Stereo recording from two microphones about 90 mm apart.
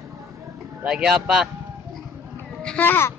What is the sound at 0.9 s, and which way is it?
Speech, 5° right (ahead or behind).